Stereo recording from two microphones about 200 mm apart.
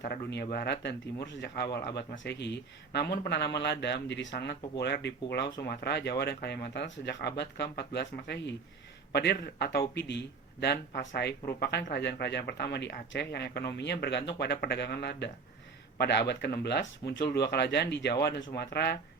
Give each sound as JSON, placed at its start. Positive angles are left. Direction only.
{"t": 0.0, "sound": "speech", "side_deg": 55}